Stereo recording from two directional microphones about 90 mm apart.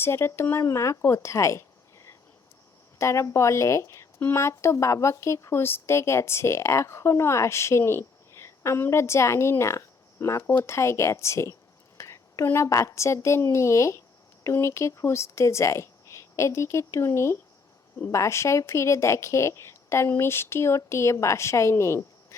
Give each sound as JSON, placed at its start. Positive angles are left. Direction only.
{"t": 0.0, "sound": "a woman's voice", "side_deg": 25}